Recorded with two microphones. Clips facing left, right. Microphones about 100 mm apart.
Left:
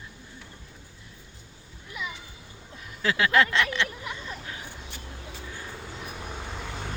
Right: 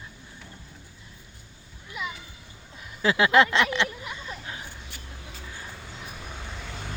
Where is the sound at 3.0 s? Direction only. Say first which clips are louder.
Right 3 dB; 20° right (ahead or behind).